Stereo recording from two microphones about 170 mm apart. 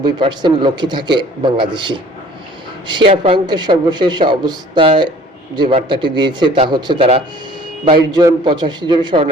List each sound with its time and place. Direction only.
0.0 s speech: 25° right (ahead or behind)
3.1 s speech: 30° right (ahead or behind)